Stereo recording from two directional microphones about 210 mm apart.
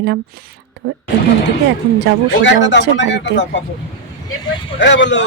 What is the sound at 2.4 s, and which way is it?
Speech, 60° left (ahead or behind).